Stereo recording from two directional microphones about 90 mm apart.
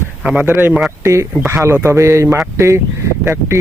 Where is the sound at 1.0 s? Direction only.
35° right (ahead or behind).